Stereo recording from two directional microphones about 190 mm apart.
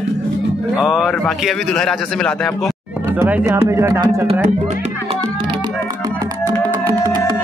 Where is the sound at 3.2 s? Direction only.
10° right (ahead or behind).